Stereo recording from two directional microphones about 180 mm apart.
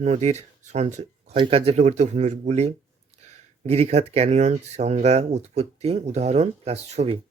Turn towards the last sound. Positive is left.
turn(degrees=-35)  # may be behind; listen again after turning